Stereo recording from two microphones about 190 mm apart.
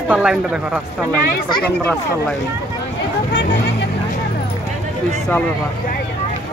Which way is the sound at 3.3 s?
65° left (ahead or behind).